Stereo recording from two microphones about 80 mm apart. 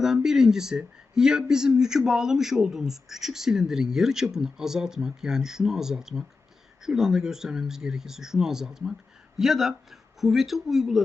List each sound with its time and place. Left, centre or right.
0.0 s a man's voice: centre